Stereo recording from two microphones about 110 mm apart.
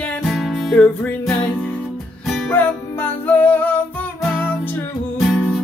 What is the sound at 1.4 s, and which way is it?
Music, 15° left (ahead or behind).